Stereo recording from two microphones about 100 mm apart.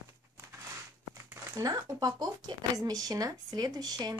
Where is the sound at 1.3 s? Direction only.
30° right (ahead or behind).